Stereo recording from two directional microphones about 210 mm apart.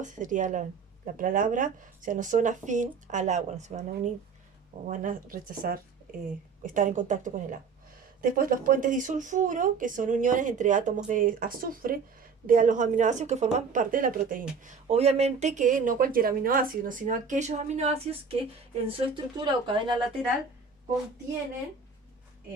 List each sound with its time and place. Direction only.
0.0 s speech: 35° right (ahead or behind)